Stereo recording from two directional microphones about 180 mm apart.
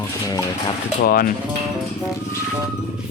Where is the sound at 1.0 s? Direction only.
55° left (ahead or behind).